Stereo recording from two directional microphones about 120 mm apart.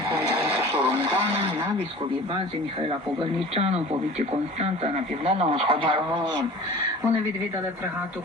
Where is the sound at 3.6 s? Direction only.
60° right (ahead or behind).